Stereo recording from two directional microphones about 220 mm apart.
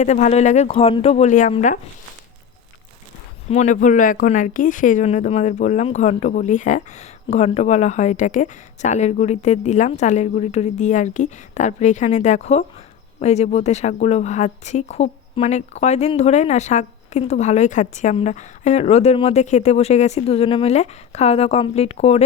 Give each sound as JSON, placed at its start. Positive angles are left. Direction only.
{"t": 0.0, "sound": "speech", "side_deg": 30}
{"t": 3.5, "sound": "speech", "side_deg": 30}